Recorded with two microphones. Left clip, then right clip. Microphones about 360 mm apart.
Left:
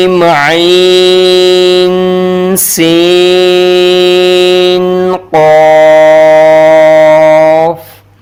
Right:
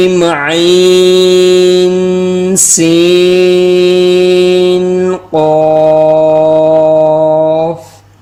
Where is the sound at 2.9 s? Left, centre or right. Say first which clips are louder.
Left 2 dB; left.